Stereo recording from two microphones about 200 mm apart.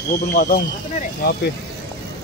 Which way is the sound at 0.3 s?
40° left (ahead or behind).